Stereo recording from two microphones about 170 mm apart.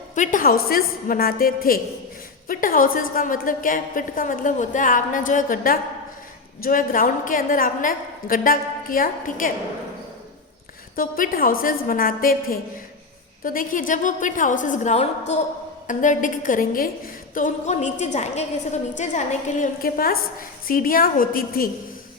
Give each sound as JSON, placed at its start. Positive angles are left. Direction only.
{"t": 0.1, "sound": "a woman's voice", "side_deg": 50}
{"t": 10.9, "sound": "a woman's voice", "side_deg": 55}
{"t": 15.3, "sound": "a sound", "side_deg": 40}
{"t": 15.9, "sound": "a woman's voice", "side_deg": 50}
{"t": 19.8, "sound": "a woman's voice", "side_deg": 60}